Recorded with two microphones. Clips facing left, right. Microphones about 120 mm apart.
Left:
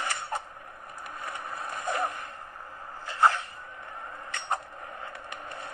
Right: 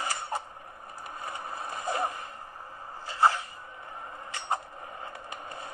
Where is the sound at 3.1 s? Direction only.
30° right (ahead or behind).